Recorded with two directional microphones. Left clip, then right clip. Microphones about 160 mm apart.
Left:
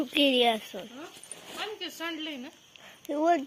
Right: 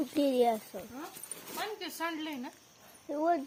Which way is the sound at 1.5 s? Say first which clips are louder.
Left 1 dB; 85° right.